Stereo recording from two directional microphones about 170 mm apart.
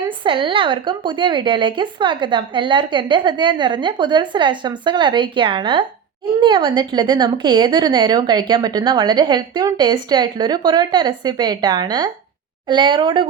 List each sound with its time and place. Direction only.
0.3 s a woman's voice: 30° right (ahead or behind)